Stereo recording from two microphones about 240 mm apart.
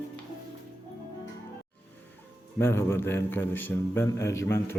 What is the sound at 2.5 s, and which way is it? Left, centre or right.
Speech, centre.